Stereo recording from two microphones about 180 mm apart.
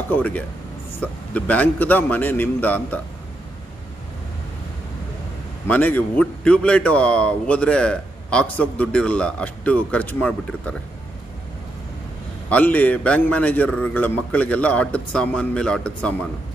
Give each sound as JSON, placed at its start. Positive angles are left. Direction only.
{"t": 0.1, "sound": "a man's voice", "side_deg": 10}
{"t": 5.7, "sound": "a man's voice", "side_deg": 10}
{"t": 12.4, "sound": "a man's voice", "side_deg": 10}